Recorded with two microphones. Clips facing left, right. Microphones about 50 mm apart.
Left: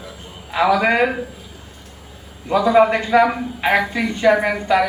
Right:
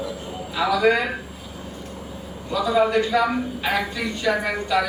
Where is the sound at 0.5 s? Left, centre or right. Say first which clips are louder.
Left 4 dB; left.